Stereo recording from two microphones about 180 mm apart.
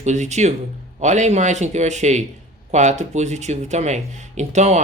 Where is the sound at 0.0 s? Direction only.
40° right (ahead or behind).